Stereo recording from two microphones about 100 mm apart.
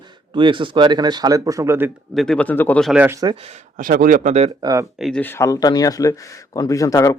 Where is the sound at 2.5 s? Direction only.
20° left (ahead or behind).